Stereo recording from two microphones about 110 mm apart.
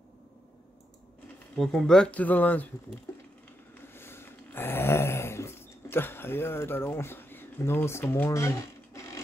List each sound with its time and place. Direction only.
1.5 s speech: 5° left (ahead or behind)
3.9 s snoring: 20° left (ahead or behind)